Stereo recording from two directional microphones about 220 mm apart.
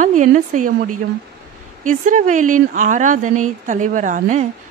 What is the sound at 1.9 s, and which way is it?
Speech, 35° right (ahead or behind).